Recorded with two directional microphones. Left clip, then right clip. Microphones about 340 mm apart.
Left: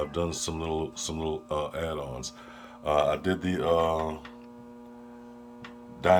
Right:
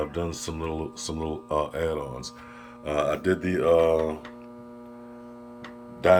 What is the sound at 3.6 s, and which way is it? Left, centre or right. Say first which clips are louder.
Mantra: right 5 dB; left.